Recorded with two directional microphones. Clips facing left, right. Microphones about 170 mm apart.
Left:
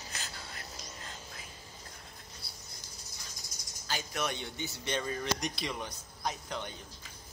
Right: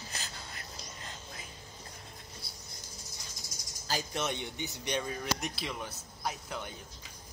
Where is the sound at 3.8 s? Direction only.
35° right (ahead or behind).